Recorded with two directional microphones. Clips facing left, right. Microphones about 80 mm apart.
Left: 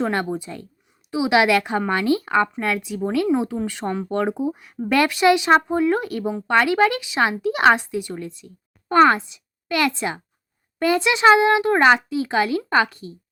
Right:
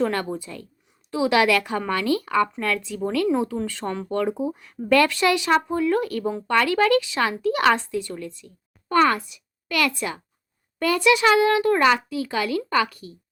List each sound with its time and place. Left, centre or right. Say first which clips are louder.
0.0 s a woman's voice: left 1 dB; left
4.4 s a woman's voice: right 1 dB; centre